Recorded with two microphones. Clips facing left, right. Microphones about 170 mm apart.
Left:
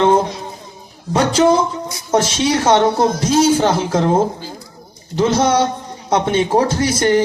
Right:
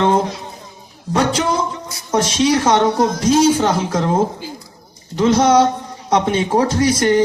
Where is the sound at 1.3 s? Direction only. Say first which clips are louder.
Left 6 dB; 30° left (ahead or behind).